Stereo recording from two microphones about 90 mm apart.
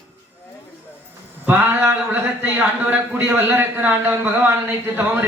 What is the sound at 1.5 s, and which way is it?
A man's voice, 20° right (ahead or behind).